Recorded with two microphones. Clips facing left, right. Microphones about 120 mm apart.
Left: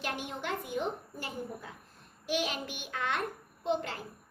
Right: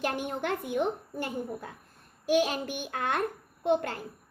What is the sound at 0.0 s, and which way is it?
A woman's voice, 50° right (ahead or behind).